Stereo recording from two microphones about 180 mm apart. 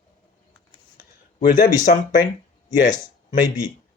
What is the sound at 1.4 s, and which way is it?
Speech, 55° left (ahead or behind).